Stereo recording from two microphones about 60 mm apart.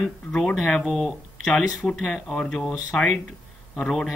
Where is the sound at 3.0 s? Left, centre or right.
Centre.